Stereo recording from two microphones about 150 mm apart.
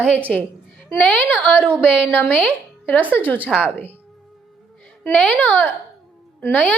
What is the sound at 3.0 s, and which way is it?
Speech, 10° right (ahead or behind).